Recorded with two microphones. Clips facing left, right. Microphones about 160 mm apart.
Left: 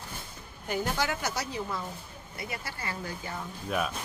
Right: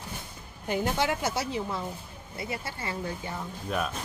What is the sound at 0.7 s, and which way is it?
A woman's voice, 25° right (ahead or behind).